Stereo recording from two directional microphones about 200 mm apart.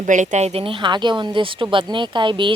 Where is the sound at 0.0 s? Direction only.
40° right (ahead or behind).